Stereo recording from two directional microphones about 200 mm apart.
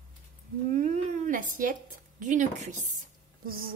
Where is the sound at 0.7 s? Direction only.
40° right (ahead or behind).